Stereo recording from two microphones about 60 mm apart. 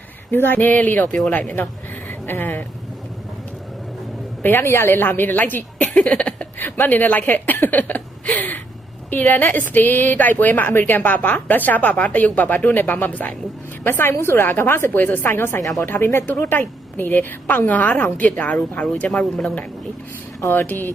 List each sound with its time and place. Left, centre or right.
0.3 s a woman's voice: left
4.4 s a woman's voice: left
6.0 s a woman's voice: centre
6.6 s a woman's voice: left
13.8 s a woman's voice: left
19.1 s speech: centre
20.5 s a woman's voice: left